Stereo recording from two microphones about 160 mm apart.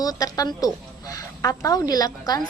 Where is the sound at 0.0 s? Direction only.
25° left (ahead or behind).